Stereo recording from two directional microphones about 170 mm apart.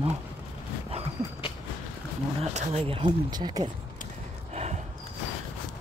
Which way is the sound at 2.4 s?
40° right (ahead or behind).